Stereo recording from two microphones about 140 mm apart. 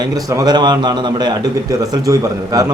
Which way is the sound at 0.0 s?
25° right (ahead or behind).